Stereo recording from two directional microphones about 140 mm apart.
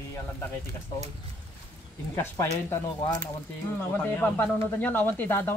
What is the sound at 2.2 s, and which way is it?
Speech, 20° left (ahead or behind).